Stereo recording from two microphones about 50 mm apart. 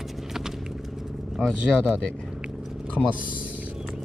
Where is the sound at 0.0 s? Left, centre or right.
Centre.